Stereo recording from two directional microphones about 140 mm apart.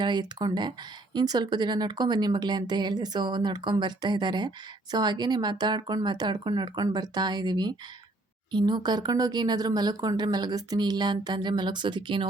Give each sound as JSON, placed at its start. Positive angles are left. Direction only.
{"t": 0.0, "sound": "speech", "side_deg": -30}